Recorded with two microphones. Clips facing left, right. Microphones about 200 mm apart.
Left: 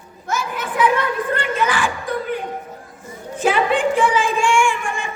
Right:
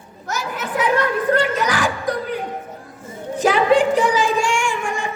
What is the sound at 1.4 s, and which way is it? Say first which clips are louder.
Music: right 1 dB; 40° right (ahead or behind).